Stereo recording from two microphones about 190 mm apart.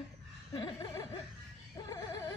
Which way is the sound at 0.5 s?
20° left (ahead or behind).